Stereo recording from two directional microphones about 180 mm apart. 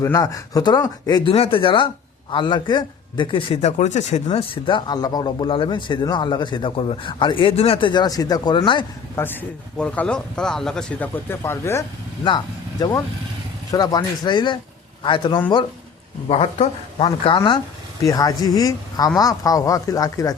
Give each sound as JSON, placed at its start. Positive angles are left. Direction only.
{"t": 0.0, "sound": "a man's voice", "side_deg": 20}
{"t": 9.1, "sound": "speech", "side_deg": 10}
{"t": 13.7, "sound": "a man's voice", "side_deg": 20}
{"t": 17.1, "sound": "a man's voice", "side_deg": 25}